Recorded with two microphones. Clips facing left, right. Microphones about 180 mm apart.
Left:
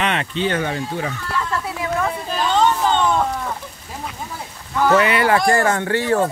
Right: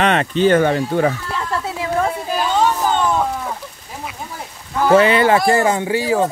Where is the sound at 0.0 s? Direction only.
40° right (ahead or behind); by 1.1 s 60° right (ahead or behind).